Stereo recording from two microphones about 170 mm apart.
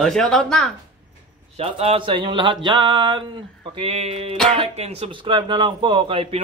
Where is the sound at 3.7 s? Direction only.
35° right (ahead or behind).